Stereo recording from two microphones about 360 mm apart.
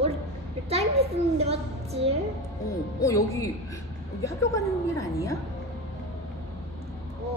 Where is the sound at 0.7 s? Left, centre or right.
Centre.